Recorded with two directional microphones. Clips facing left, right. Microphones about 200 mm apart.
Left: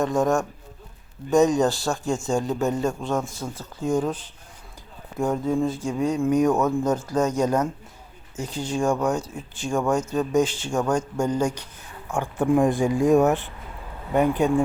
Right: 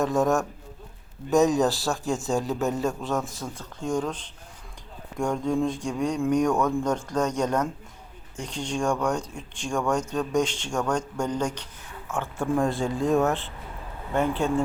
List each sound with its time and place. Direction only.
0.0 s a man's voice: centre (ahead or behind); by 14.5 s 15° left (ahead or behind)